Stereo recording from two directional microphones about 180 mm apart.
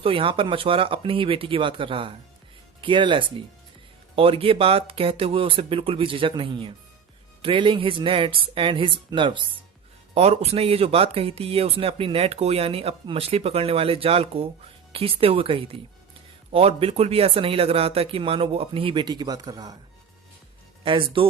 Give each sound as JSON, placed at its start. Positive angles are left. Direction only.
{"t": 0.0, "sound": "speech", "side_deg": -30}
{"t": 20.8, "sound": "speech", "side_deg": -30}